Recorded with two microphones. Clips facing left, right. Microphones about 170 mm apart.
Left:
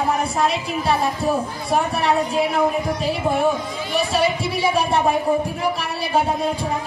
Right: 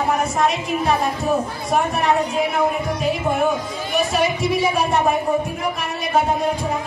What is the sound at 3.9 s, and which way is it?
Speech, 30° left (ahead or behind).